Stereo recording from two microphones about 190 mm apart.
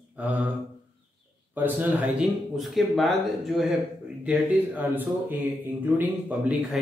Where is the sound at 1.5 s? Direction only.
10° right (ahead or behind).